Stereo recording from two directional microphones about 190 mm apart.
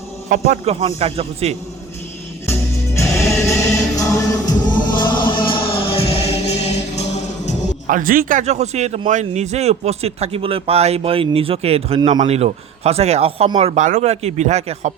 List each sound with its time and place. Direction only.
0.3 s a man's voice: 40° right (ahead or behind)
2.5 s music: 15° left (ahead or behind); by 7.5 s 35° left (ahead or behind)
7.9 s a man's voice: 45° right (ahead or behind)